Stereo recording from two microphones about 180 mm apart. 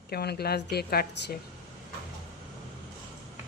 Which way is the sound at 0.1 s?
60° left (ahead or behind).